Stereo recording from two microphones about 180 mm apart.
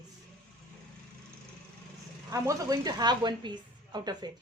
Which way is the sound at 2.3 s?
20° right (ahead or behind).